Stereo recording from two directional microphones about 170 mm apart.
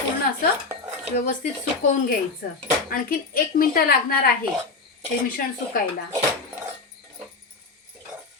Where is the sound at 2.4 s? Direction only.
60° left (ahead or behind).